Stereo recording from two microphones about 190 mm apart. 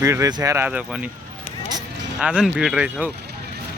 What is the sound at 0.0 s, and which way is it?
Speech, 15° right (ahead or behind).